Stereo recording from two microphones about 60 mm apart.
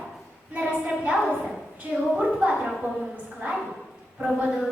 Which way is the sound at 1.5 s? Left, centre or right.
Centre.